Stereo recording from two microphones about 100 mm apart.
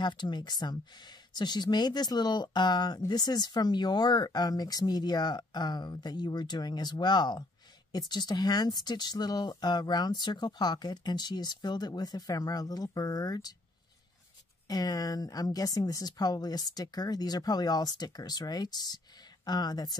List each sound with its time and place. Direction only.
0.0 s speech: 45° left (ahead or behind)
14.7 s a woman's voice: 40° left (ahead or behind)